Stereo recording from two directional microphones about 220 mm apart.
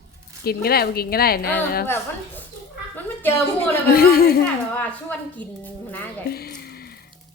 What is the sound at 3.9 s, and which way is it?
Speech, 45° left (ahead or behind).